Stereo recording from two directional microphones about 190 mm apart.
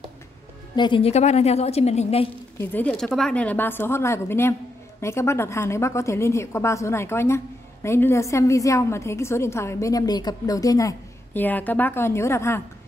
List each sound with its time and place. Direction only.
0.7 s a woman's voice: 25° left (ahead or behind)
2.6 s a woman's voice: 10° left (ahead or behind)